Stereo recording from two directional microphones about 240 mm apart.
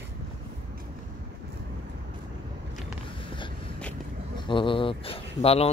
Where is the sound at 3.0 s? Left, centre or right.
Centre.